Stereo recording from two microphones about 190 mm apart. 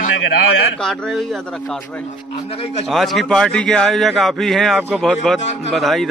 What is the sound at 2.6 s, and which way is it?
Speech, 35° left (ahead or behind).